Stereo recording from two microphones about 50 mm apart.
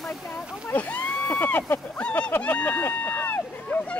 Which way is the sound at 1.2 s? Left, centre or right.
Left.